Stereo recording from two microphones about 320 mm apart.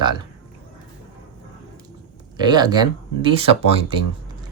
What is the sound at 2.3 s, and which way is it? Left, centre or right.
Speech, centre.